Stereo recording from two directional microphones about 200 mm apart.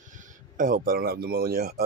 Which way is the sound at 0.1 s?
40° right (ahead or behind).